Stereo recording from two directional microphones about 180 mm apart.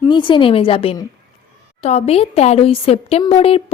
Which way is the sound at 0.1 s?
25° left (ahead or behind).